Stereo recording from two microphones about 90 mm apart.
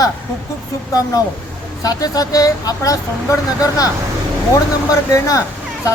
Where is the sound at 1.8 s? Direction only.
45° left (ahead or behind).